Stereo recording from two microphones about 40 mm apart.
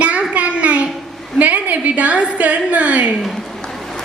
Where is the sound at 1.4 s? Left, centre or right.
Right.